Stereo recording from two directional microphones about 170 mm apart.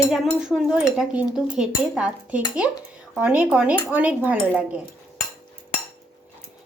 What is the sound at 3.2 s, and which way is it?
Speech, 10° right (ahead or behind).